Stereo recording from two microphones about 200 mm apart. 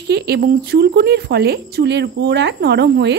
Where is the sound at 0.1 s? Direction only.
55° right (ahead or behind).